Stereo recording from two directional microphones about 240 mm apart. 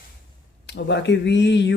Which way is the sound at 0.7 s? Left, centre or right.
Left.